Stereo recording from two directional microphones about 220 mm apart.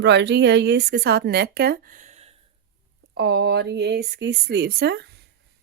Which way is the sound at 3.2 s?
50° right (ahead or behind).